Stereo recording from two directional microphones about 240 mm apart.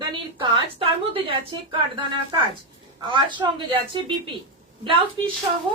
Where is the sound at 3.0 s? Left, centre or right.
Centre.